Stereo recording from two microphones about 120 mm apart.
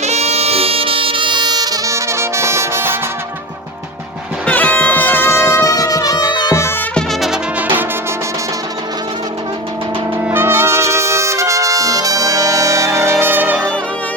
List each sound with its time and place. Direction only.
0.0 s music: 65° right (ahead or behind); by 3.0 s 20° right (ahead or behind)
4.4 s music: 10° left (ahead or behind); by 6.6 s 30° left (ahead or behind)
6.9 s music: centre (ahead or behind)
10.2 s trumpet: 15° right (ahead or behind)